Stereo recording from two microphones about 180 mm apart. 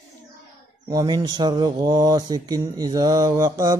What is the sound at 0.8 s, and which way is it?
Speech, 20° right (ahead or behind).